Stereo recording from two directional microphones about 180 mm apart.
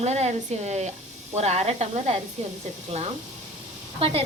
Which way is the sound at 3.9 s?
30° right (ahead or behind).